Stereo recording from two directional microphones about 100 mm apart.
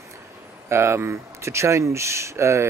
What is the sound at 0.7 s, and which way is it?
Speech, 25° right (ahead or behind).